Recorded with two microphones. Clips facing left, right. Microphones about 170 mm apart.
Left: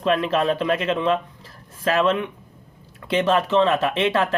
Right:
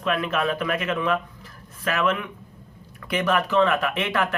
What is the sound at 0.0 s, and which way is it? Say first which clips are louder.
Speech: left 4 dB; 30° left (ahead or behind).